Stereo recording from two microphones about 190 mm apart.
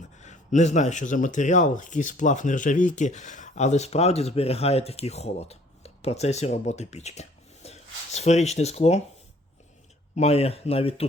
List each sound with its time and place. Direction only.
0.2 s speech: 40° left (ahead or behind)
10.2 s speech: 35° left (ahead or behind)